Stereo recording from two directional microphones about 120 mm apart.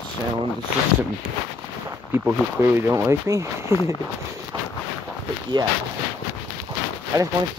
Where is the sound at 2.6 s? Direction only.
25° right (ahead or behind).